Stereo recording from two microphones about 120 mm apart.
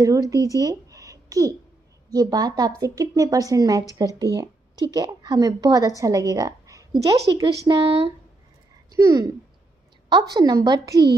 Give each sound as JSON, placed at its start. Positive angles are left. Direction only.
{"t": 0.0, "sound": "a woman's voice", "side_deg": -30}
{"t": 0.5, "sound": "a sound", "side_deg": -30}
{"t": 2.0, "sound": "a woman's voice", "side_deg": -30}
{"t": 8.9, "sound": "a woman's voice", "side_deg": -30}